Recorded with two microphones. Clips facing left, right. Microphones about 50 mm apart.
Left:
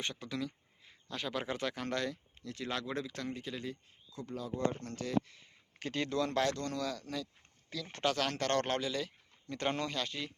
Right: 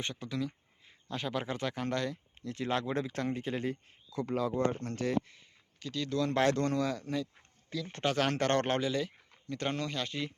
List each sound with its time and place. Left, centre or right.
0.0 s speech: centre
2.4 s speech: centre; by 3.8 s right
4.1 s speech: right
4.8 s speech: right
5.8 s speech: left
6.3 s speech: right
6.7 s speech: right
9.5 s speech: centre
10.0 s speech: centre